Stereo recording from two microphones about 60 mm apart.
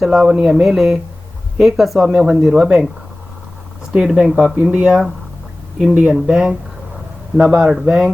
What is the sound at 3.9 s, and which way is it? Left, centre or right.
Speech, centre.